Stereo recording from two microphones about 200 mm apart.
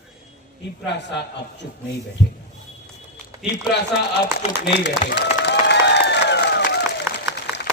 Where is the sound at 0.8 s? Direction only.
60° left (ahead or behind).